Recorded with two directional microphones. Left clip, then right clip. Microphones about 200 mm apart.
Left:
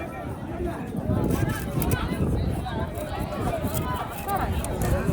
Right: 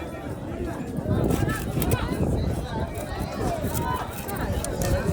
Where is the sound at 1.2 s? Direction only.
Centre (ahead or behind).